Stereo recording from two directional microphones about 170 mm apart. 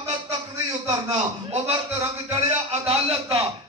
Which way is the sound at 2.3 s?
35° right (ahead or behind).